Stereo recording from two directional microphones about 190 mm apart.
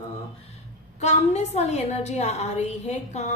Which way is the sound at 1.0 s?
35° left (ahead or behind).